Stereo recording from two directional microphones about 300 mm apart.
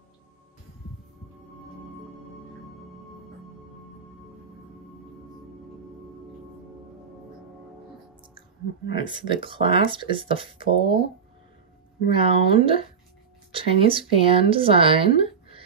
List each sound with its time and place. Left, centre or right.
8.9 s speech: centre
12.1 s speech: centre